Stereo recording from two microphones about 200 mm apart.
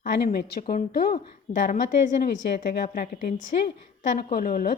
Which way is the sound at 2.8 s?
45° left (ahead or behind).